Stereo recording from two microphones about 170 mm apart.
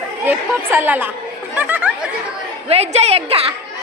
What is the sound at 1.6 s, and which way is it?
Chatter, 10° right (ahead or behind).